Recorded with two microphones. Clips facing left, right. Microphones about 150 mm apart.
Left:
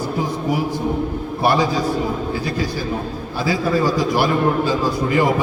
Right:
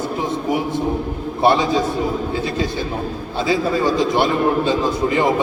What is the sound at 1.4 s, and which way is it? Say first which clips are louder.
Speech: right 2 dB; 25° right (ahead or behind).